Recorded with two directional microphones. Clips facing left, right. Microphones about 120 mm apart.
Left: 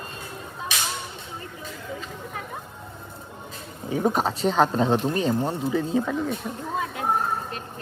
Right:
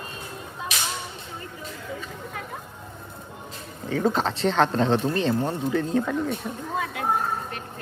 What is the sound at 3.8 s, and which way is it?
Speech, 15° left (ahead or behind).